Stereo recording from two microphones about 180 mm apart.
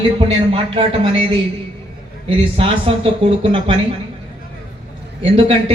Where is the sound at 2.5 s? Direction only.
30° right (ahead or behind).